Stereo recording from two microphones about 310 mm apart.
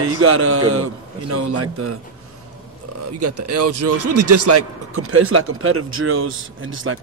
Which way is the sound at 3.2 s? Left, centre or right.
Right.